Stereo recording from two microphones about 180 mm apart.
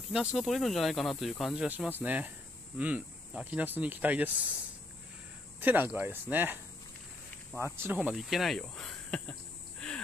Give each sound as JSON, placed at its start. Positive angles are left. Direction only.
{"t": 0.1, "sound": "speech", "side_deg": -5}
{"t": 5.6, "sound": "speech", "side_deg": -10}
{"t": 7.6, "sound": "speech", "side_deg": -15}